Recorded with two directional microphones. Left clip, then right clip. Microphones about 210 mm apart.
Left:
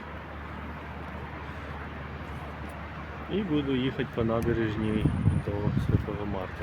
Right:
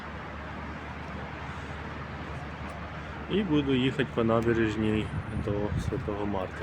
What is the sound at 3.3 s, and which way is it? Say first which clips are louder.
Speech: right 2 dB; 10° right (ahead or behind).